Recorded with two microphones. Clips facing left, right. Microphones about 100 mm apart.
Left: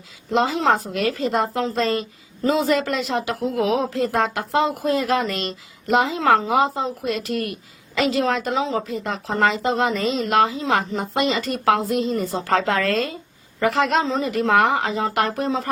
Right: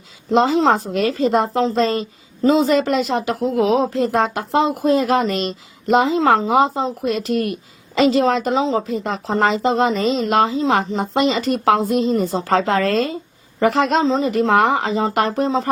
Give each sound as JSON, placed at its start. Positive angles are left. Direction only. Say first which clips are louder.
{"t": 0.3, "sound": "a woman's voice", "louder": "right 4 dB", "side_deg": -25}